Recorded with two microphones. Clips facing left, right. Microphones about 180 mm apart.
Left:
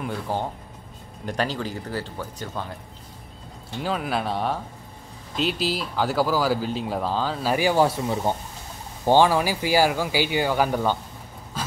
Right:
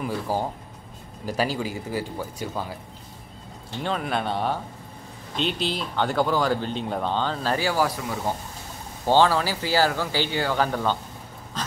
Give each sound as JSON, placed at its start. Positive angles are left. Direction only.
{"t": 0.0, "sound": "speech", "side_deg": -5}
{"t": 3.8, "sound": "speech", "side_deg": 5}
{"t": 7.7, "sound": "speech", "side_deg": 25}
{"t": 9.0, "sound": "speech", "side_deg": 15}
{"t": 11.6, "sound": "a sound", "side_deg": 5}